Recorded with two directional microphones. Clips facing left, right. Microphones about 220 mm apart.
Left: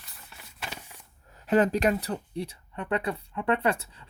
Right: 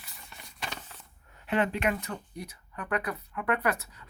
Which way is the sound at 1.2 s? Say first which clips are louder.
Left 6 dB; 35° left (ahead or behind).